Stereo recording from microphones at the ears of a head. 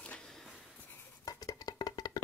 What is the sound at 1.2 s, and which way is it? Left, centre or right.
Music, left.